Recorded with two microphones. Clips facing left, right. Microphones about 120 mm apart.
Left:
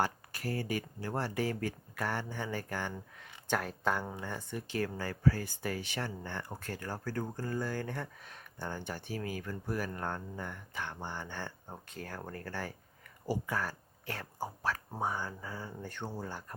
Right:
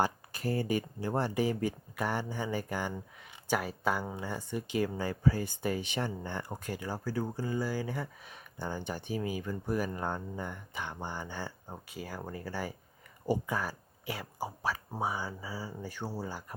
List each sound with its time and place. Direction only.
0.0 s speech: 25° right (ahead or behind); by 16.6 s 5° right (ahead or behind)